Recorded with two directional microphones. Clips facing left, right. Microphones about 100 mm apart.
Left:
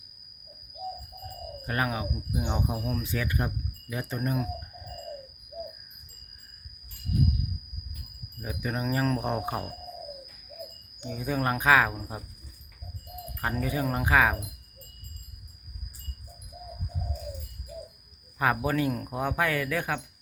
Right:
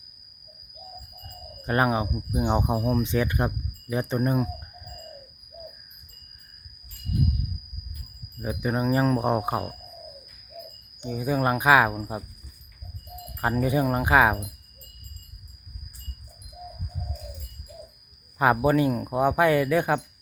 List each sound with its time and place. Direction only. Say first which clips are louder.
1.6 s speech: right 7 dB; 30° right (ahead or behind)
2.4 s cricket: right 8 dB; 35° right (ahead or behind)
8.4 s cricket: right 6 dB; 25° right (ahead or behind)
9.0 s speech: right 5 dB; 15° right (ahead or behind)
11.0 s speech: right 4 dB; 10° right (ahead or behind)
13.4 s cricket: right 6 dB; 25° right (ahead or behind)
18.3 s cricket: right 6 dB; 20° right (ahead or behind)